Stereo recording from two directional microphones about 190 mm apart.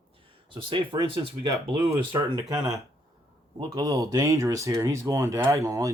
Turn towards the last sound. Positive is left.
turn(degrees=-15)  # may be behind; listen again after turning